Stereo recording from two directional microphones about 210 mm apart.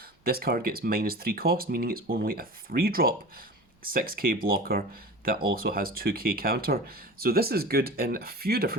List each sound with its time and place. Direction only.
0.3 s speech: 45° right (ahead or behind)